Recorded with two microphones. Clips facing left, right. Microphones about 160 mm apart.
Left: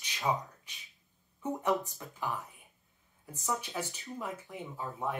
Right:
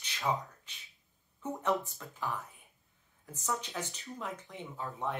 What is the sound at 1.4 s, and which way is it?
Speech, 15° left (ahead or behind).